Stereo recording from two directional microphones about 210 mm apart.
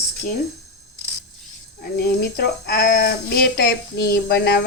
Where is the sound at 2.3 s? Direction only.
45° left (ahead or behind).